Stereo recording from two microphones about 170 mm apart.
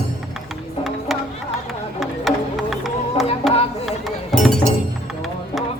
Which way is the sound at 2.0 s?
Centre (ahead or behind).